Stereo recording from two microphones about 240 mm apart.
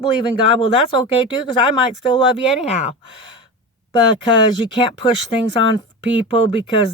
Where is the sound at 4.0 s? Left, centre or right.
Right.